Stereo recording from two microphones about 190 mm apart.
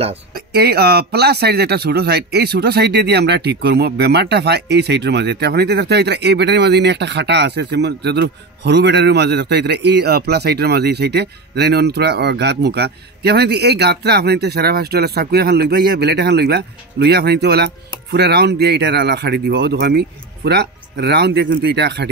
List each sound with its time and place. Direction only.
0.3 s speech: 55° right (ahead or behind)